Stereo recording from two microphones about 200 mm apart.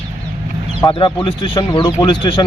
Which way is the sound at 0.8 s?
25° left (ahead or behind).